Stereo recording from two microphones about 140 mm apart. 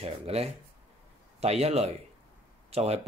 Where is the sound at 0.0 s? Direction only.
50° right (ahead or behind).